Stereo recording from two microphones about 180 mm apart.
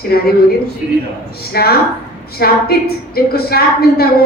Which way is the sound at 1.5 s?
60° left (ahead or behind).